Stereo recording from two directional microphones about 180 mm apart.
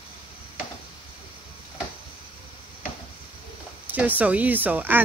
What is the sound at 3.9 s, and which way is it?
Speech, 10° right (ahead or behind).